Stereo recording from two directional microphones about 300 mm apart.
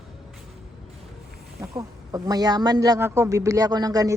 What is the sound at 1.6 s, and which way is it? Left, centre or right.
A woman's voice, centre.